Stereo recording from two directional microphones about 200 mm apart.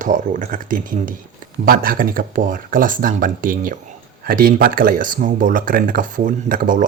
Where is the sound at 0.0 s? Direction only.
40° right (ahead or behind).